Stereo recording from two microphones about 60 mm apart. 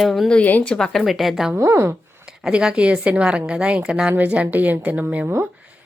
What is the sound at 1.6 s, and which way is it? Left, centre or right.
Speech, right.